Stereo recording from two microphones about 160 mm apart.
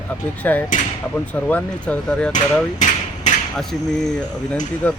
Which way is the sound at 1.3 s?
10° left (ahead or behind).